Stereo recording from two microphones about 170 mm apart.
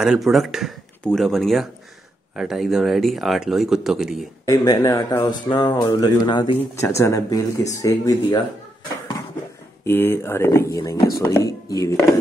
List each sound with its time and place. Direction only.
0.0 s speech: centre (ahead or behind)
4.5 s speech: 20° left (ahead or behind)
6.7 s speech: 15° left (ahead or behind)
9.8 s speech: 15° left (ahead or behind)